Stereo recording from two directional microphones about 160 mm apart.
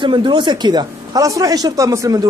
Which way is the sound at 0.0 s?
30° right (ahead or behind).